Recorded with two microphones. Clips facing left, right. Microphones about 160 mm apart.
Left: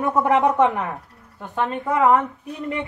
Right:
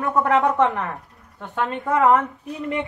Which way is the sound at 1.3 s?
5° left (ahead or behind).